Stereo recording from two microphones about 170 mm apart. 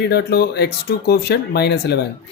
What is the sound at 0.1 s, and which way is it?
Speech, 75° left (ahead or behind).